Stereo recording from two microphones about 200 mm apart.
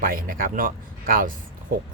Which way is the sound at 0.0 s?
45° right (ahead or behind).